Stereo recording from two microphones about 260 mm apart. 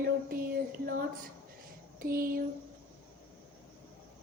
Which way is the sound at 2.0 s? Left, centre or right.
Right.